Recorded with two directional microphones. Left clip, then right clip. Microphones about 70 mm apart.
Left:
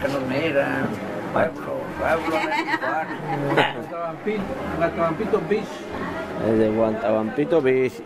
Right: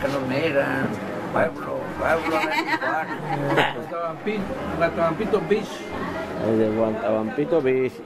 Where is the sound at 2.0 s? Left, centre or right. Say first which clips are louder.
Even; centre.